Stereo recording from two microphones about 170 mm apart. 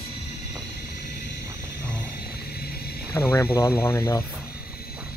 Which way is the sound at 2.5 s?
65° left (ahead or behind).